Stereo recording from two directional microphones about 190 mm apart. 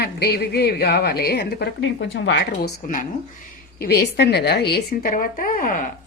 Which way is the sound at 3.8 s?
55° left (ahead or behind).